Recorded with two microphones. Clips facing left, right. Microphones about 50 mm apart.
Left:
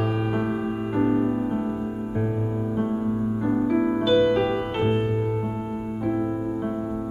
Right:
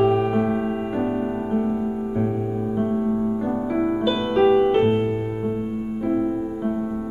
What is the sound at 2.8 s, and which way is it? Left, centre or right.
Music, centre.